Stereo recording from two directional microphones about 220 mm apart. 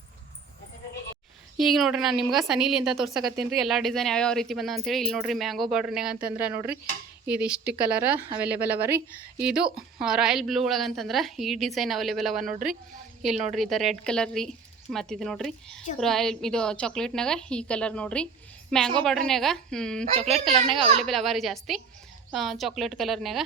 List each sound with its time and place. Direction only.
1.5 s a woman's voice: centre (ahead or behind)
13.3 s a woman's voice: 35° right (ahead or behind)
13.6 s a woman's voice: centre (ahead or behind)
20.1 s a child's voice: 30° right (ahead or behind)
21.0 s a woman's voice: centre (ahead or behind)